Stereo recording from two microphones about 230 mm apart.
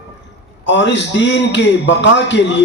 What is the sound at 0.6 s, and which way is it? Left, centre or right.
A man's voice, left.